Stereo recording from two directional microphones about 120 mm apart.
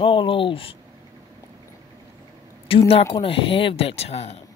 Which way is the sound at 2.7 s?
50° left (ahead or behind).